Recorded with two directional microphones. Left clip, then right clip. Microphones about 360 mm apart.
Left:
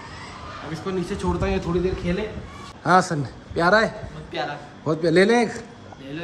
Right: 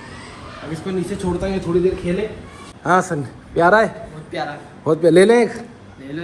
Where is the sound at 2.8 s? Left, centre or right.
Centre.